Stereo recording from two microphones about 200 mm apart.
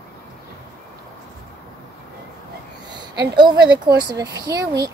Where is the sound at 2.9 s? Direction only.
20° right (ahead or behind).